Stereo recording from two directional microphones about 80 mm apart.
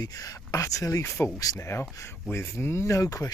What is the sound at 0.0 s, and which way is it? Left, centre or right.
Speech, left.